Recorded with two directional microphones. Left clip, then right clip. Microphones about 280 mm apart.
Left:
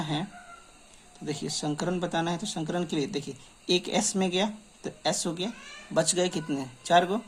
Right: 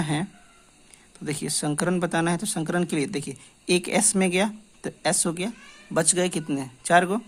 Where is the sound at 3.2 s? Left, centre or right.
Right.